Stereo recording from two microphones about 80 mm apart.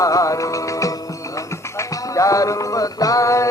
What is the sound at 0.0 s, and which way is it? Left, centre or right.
Music, left.